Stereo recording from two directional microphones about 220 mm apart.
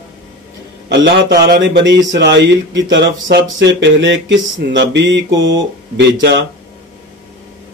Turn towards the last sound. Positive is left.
turn(degrees=-50)  # may be behind; listen again after turning